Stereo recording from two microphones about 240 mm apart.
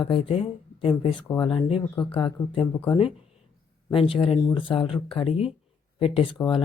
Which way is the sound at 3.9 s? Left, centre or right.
Left.